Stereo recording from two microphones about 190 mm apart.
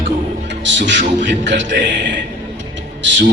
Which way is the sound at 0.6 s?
70° right (ahead or behind).